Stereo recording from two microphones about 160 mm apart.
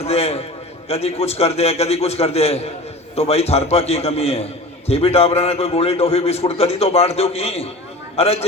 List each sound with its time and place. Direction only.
0.0 s a man's voice: 40° left (ahead or behind)